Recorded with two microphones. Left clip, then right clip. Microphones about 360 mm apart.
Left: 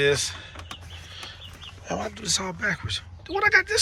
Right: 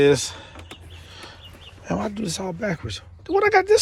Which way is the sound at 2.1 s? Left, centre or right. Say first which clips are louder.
Left 1 dB; centre.